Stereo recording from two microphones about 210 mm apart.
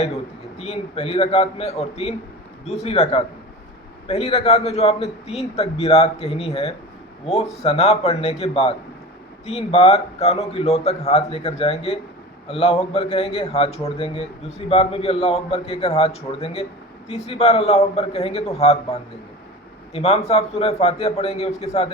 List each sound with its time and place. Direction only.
0.6 s a man's voice: 30° left (ahead or behind)